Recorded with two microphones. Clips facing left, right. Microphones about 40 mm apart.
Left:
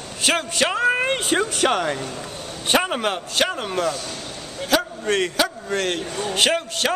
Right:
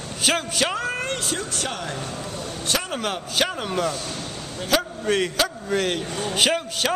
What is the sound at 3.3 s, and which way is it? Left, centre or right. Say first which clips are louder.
Speech: right 1 dB; centre.